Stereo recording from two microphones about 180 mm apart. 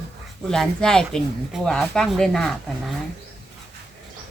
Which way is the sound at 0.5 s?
5° left (ahead or behind).